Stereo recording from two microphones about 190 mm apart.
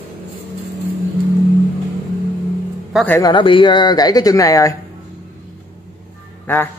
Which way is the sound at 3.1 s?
20° left (ahead or behind).